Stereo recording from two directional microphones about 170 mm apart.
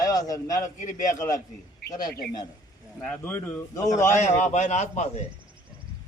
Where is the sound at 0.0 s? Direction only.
20° left (ahead or behind).